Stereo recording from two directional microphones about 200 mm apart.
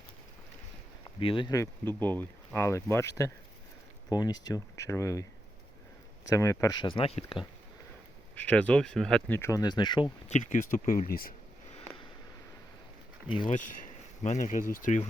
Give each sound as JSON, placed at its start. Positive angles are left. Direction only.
{"t": 1.2, "sound": "speech", "side_deg": 25}
{"t": 6.2, "sound": "speech", "side_deg": 15}
{"t": 8.4, "sound": "speech", "side_deg": 5}
{"t": 10.2, "sound": "speech", "side_deg": 35}
{"t": 13.5, "sound": "speech", "side_deg": 40}